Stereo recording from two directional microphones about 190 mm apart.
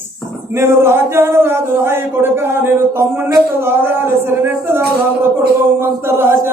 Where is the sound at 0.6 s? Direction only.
10° right (ahead or behind).